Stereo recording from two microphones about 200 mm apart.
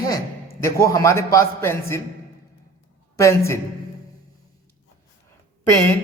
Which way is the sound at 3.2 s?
15° left (ahead or behind).